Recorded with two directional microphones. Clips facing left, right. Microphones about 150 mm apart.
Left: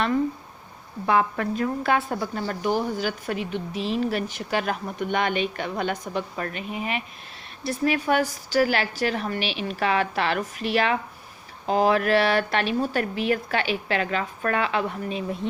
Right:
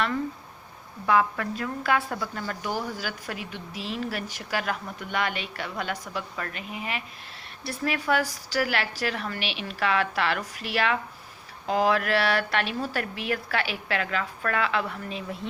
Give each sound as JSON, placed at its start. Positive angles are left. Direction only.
{"t": 1.0, "sound": "a woman's voice", "side_deg": 25}